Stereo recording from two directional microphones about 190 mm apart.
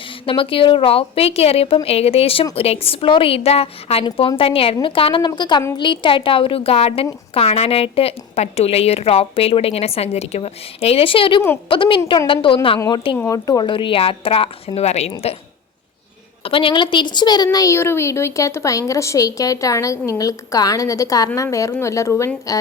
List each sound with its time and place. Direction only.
0.3 s a woman's voice: 30° left (ahead or behind)
16.4 s a woman's voice: 30° left (ahead or behind)